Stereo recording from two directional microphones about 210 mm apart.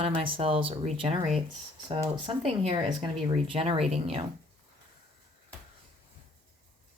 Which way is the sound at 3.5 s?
25° right (ahead or behind).